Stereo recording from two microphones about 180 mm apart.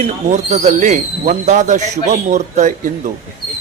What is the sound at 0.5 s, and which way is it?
Speech, 40° right (ahead or behind).